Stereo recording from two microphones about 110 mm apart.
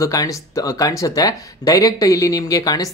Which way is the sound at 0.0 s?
35° left (ahead or behind).